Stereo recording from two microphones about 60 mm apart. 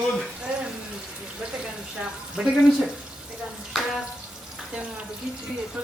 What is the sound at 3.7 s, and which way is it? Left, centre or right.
Speech, centre.